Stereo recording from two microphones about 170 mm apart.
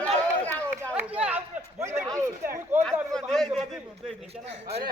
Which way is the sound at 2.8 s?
5° left (ahead or behind).